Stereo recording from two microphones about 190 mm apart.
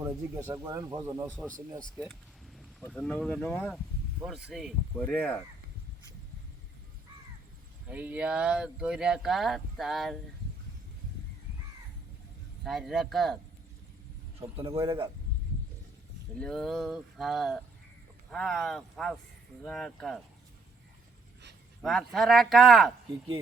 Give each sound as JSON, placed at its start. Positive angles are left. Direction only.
{"t": 0.0, "sound": "a man's voice", "side_deg": -15}
{"t": 1.3, "sound": "speech", "side_deg": 5}
{"t": 4.3, "sound": "speech", "side_deg": 0}
{"t": 4.9, "sound": "speech", "side_deg": 10}
{"t": 7.9, "sound": "speech", "side_deg": -10}
{"t": 12.6, "sound": "speech", "side_deg": 0}
{"t": 14.5, "sound": "a man's voice", "side_deg": -30}
{"t": 16.4, "sound": "speech", "side_deg": 5}
{"t": 21.8, "sound": "speech", "side_deg": 0}